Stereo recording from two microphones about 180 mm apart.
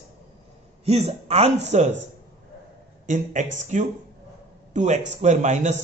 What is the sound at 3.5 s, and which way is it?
A man's voice, 40° right (ahead or behind).